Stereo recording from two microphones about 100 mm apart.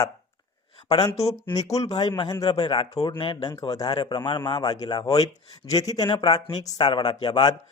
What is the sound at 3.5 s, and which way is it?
A man's voice, 35° left (ahead or behind).